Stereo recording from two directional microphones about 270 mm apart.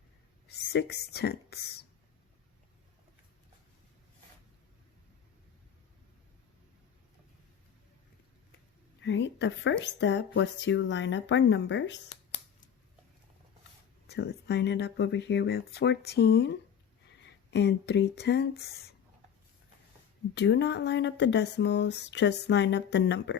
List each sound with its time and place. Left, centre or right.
0.4 s speech: left
9.0 s speech: left
14.1 s speech: left
20.3 s speech: left